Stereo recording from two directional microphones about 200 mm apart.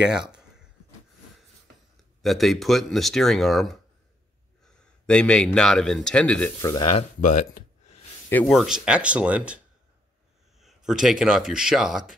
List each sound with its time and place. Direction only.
0.3 s a sound: 5° right (ahead or behind)
2.2 s speech: centre (ahead or behind)
5.0 s speech: 5° left (ahead or behind)
6.6 s speech: 15° left (ahead or behind)
7.0 s speech: 40° left (ahead or behind)
8.3 s speech: 5° left (ahead or behind)
10.6 s speech: centre (ahead or behind)